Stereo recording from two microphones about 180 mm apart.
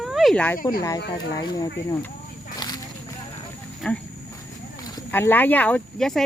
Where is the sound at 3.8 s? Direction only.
5° left (ahead or behind).